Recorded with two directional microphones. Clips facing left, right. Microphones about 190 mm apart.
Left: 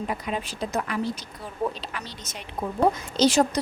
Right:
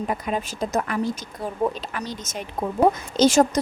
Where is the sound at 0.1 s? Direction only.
45° right (ahead or behind).